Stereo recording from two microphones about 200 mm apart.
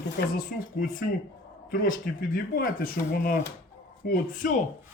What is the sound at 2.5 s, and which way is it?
A man's voice, 50° left (ahead or behind).